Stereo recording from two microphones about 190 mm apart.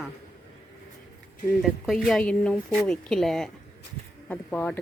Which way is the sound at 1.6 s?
Centre (ahead or behind).